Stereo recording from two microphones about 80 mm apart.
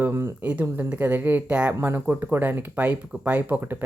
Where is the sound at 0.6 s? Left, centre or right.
Right.